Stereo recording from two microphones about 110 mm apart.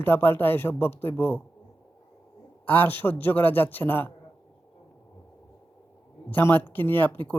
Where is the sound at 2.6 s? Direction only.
20° left (ahead or behind).